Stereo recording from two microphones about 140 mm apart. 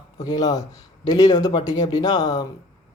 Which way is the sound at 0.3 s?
25° left (ahead or behind).